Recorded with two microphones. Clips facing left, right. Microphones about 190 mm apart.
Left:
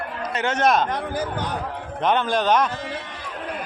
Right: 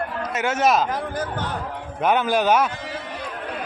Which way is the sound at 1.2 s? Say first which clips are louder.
Left 1 dB; 15° left (ahead or behind).